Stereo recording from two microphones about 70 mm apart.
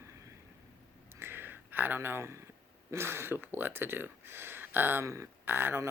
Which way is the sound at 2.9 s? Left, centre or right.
Right.